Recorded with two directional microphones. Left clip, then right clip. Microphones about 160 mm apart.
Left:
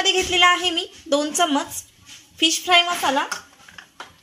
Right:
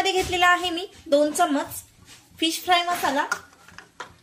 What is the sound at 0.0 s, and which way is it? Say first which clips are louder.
A woman's voice: left 4 dB; 40° left (ahead or behind).